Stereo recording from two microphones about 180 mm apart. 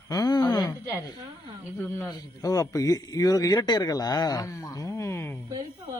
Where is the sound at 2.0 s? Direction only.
20° left (ahead or behind).